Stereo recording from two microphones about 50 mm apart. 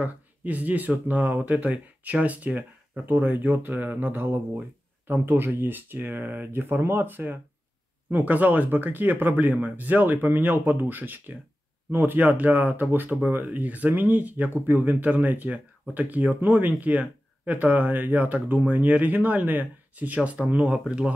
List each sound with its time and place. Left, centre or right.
0.0 s speech: right
3.1 s speech: right; by 21.1 s centre